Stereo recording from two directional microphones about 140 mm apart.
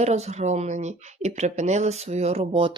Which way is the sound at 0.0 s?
50° right (ahead or behind).